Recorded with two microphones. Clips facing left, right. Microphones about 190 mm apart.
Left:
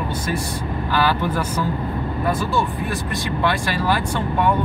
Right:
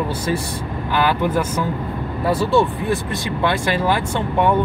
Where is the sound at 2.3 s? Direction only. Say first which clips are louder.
Right 6 dB; 30° right (ahead or behind).